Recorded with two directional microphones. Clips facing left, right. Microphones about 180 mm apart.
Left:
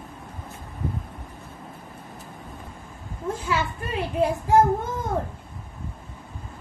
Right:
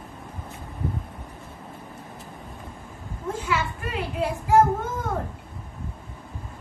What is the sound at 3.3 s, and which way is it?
Children playing, 35° left (ahead or behind).